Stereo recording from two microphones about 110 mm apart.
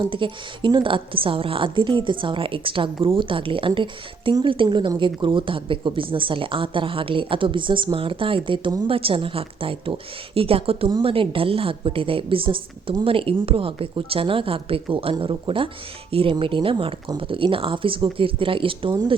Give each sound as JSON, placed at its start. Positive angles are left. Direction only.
{"t": 0.0, "sound": "a woman's voice", "side_deg": -50}